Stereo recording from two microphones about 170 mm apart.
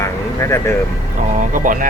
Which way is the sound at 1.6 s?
50° right (ahead or behind).